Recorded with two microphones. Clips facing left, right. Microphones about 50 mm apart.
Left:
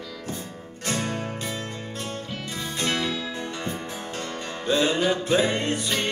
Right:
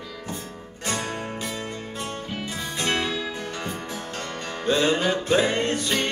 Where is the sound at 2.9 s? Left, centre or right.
Right.